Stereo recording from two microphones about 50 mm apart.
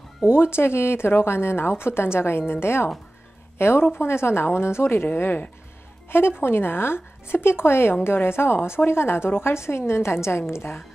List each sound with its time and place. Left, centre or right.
0.3 s a woman's voice: left